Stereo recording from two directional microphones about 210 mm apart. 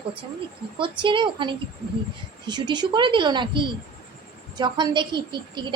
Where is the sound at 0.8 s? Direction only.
25° right (ahead or behind).